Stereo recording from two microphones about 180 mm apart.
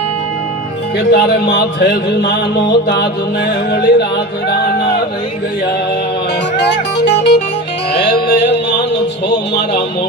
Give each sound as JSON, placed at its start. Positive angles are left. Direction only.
{"t": 0.9, "sound": "music", "side_deg": 65}
{"t": 6.6, "sound": "music", "side_deg": 70}